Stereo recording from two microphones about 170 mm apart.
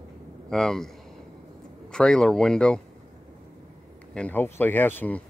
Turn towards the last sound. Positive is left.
turn(degrees=10)  # may be behind; listen again after turning